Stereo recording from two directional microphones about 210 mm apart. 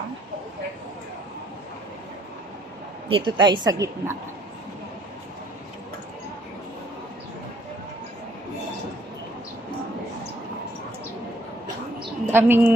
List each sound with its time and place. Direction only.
3.1 s a woman's voice: 25° right (ahead or behind)
12.3 s a woman's voice: 10° right (ahead or behind)